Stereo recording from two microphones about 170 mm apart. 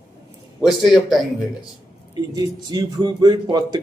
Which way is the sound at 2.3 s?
25° right (ahead or behind).